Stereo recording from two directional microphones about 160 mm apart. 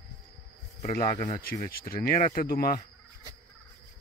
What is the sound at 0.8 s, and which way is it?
Speech, 65° left (ahead or behind).